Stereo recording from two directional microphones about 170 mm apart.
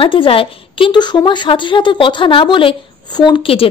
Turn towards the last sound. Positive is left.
turn(degrees=30)  # may be behind; listen again after turning